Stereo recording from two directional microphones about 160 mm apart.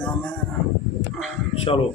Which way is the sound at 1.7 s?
35° left (ahead or behind).